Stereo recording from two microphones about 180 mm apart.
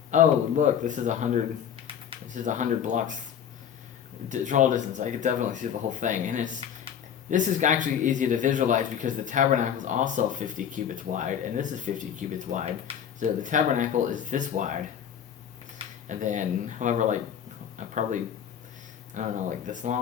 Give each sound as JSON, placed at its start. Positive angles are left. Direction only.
{"t": 0.1, "sound": "speech", "side_deg": -45}
{"t": 4.3, "sound": "speech", "side_deg": -45}
{"t": 16.0, "sound": "speech", "side_deg": -45}